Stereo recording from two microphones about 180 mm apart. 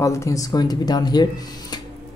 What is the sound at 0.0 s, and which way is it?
Speech, 15° left (ahead or behind).